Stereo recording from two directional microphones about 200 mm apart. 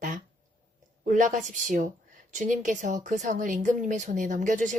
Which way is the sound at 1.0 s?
40° right (ahead or behind).